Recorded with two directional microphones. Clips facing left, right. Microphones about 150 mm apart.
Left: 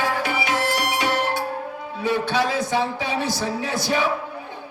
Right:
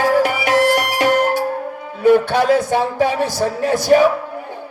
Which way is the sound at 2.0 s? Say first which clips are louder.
Right 9 dB; 50° right (ahead or behind).